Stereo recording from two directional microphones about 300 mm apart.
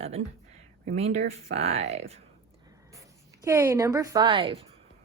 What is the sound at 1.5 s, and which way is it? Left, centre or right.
Speech, right.